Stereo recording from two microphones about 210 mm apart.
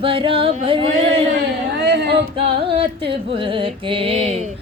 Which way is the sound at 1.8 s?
55° right (ahead or behind).